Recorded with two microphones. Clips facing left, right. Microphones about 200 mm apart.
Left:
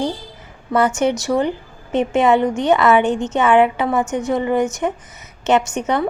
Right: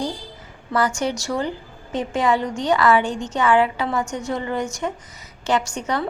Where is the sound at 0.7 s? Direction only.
20° left (ahead or behind).